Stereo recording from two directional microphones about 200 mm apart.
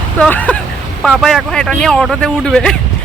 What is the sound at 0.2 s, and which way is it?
Speech, 5° left (ahead or behind).